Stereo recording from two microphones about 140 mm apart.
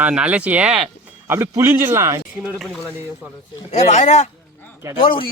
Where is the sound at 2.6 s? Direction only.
5° left (ahead or behind).